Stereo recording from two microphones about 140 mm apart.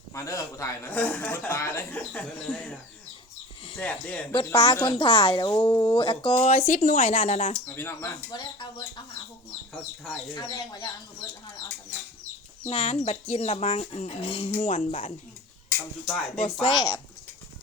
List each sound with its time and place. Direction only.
0.1 s a man's voice: 20° left (ahead or behind)
3.8 s a man's voice: 10° left (ahead or behind)
4.5 s speech: 30° left (ahead or behind); by 7.5 s 55° left (ahead or behind)
7.8 s a man's voice: 15° left (ahead or behind)
8.3 s speech: 30° left (ahead or behind)
10.3 s speech: 30° left (ahead or behind)
12.6 s speech: 45° left (ahead or behind)
14.6 s speech: 55° left (ahead or behind)
16.0 s speech: 5° left (ahead or behind)
16.4 s speech: 40° left (ahead or behind)